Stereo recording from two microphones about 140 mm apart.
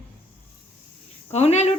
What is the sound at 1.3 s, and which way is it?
Speech, 50° left (ahead or behind).